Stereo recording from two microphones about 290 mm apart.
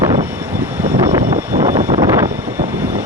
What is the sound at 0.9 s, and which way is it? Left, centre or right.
Vehicle, centre.